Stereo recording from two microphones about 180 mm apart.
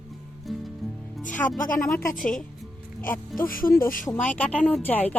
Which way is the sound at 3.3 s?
50° left (ahead or behind).